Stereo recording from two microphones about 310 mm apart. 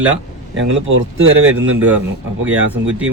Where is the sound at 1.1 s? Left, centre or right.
Right.